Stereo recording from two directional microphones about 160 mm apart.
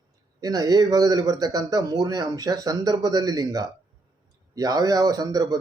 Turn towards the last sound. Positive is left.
turn(degrees=-20)  # may be behind; listen again after turning